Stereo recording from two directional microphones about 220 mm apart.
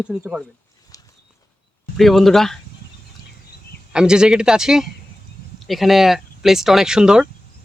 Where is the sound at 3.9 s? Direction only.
5° right (ahead or behind).